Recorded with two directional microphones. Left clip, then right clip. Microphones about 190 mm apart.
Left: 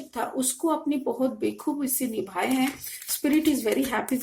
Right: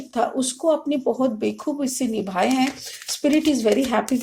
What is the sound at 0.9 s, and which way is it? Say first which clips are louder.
Speech: right 5 dB; 35° right (ahead or behind).